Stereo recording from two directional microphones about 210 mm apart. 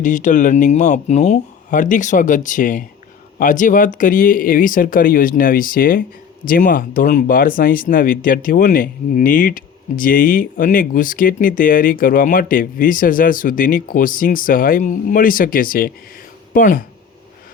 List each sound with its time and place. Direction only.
0.0 s speech: 35° left (ahead or behind)